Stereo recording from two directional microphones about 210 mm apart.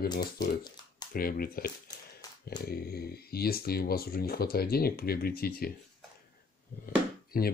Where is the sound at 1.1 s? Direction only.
45° left (ahead or behind).